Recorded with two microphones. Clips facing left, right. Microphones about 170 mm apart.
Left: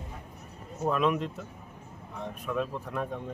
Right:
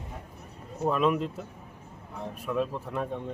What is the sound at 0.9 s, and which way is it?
Speech, centre (ahead or behind).